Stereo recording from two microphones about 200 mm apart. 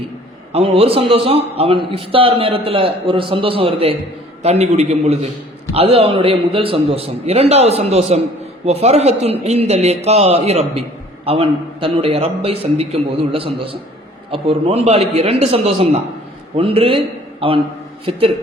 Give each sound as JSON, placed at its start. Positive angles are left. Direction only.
{"t": 0.5, "sound": "a man's voice", "side_deg": -30}